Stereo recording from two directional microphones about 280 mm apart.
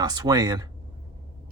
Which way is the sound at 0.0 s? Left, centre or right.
Centre.